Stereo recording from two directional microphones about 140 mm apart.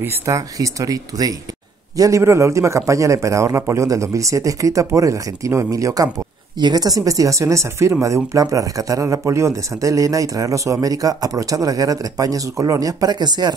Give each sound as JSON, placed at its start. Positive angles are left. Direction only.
{"t": 0.0, "sound": "speech", "side_deg": -25}